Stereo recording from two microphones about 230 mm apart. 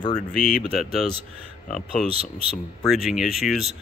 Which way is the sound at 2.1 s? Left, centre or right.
Right.